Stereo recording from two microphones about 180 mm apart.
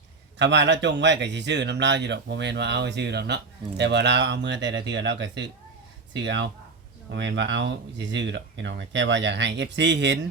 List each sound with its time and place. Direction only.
0.3 s a man's voice: 80° right